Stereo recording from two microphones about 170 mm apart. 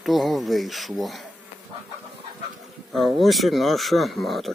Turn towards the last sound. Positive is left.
turn(degrees=0)  # may be behind; listen again after turning